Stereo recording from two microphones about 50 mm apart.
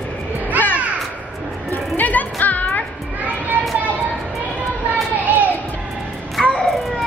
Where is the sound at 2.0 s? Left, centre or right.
Left.